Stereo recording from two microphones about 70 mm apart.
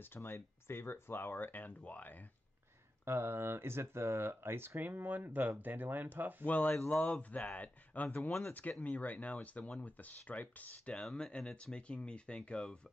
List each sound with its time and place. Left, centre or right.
0.0 s speech: left
3.1 s speech: right
6.4 s speech: left
8.3 s speech: centre
8.8 s speech: left